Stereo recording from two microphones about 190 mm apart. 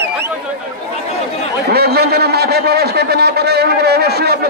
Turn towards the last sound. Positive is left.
turn(degrees=-60)  # may be behind; listen again after turning